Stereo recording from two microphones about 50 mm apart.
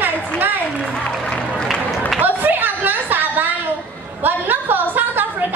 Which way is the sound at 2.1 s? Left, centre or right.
Right.